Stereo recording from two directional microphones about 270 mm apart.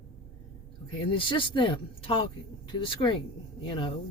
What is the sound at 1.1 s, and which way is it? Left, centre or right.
Speech, centre.